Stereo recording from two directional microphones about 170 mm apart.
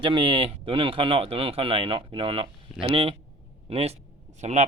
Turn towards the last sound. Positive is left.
turn(degrees=-40)  # may be behind; listen again after turning